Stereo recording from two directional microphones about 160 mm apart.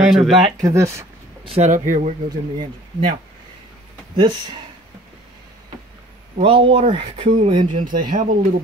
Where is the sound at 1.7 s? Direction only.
55° right (ahead or behind).